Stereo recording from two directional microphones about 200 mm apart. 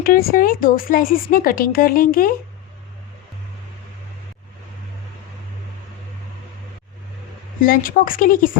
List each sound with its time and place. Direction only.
0.0 s speech: 45° left (ahead or behind)
7.6 s speech: 45° left (ahead or behind)